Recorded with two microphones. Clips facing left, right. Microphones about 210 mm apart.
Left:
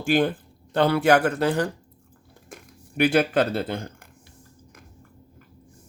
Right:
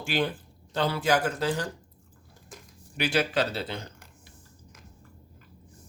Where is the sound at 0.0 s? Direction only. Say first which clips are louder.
Left 7 dB; 50° left (ahead or behind).